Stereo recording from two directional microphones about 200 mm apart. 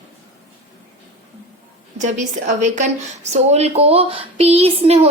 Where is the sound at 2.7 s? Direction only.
35° right (ahead or behind).